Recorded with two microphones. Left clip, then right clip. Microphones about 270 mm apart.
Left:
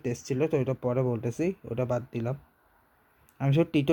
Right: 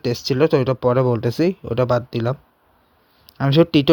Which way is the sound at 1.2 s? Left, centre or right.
Right.